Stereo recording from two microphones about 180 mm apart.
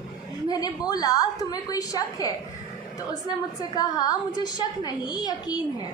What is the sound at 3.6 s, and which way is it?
A woman's voice, 20° left (ahead or behind).